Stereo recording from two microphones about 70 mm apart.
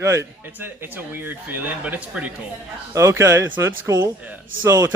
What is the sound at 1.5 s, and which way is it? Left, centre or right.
Speech, right.